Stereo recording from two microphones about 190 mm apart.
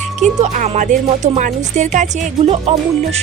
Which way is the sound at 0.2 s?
40° right (ahead or behind).